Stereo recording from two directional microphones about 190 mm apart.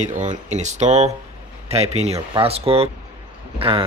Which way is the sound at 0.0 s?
40° right (ahead or behind).